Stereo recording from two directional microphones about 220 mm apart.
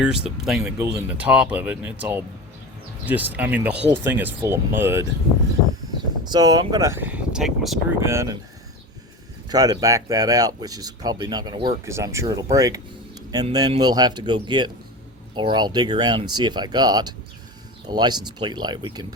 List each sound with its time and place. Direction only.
0.0 s speech: 5° right (ahead or behind)
6.2 s speech: 20° right (ahead or behind); by 7.8 s centre (ahead or behind)
8.0 s speech: 10° right (ahead or behind)
9.5 s speech: 15° right (ahead or behind)